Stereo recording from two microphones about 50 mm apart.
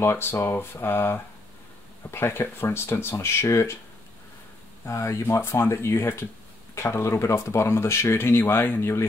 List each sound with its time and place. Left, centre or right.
0.0 s speech: left
4.8 s speech: left